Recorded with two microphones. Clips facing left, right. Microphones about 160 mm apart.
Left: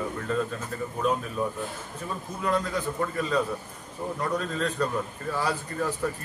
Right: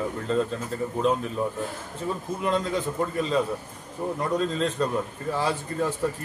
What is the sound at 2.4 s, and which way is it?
A man's voice, 20° right (ahead or behind).